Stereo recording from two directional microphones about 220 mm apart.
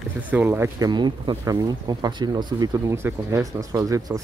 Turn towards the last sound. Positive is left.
turn(degrees=-15)  # may be behind; listen again after turning